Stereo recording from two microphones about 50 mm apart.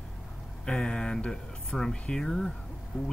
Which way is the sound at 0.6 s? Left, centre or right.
Centre.